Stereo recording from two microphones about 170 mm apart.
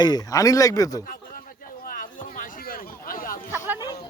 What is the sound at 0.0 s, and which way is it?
Speech, 25° left (ahead or behind).